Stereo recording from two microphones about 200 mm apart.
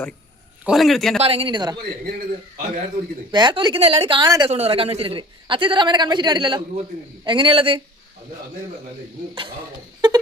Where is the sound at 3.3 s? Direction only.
20° right (ahead or behind).